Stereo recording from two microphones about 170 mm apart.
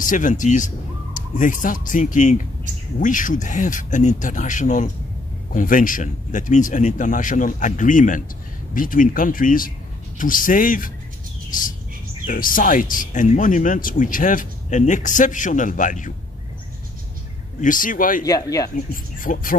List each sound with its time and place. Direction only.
0.0 s speech: 50° left (ahead or behind)
12.3 s speech: 55° left (ahead or behind)
17.6 s speech: 50° left (ahead or behind)
18.2 s speech: 20° left (ahead or behind)
19.1 s speech: 50° left (ahead or behind)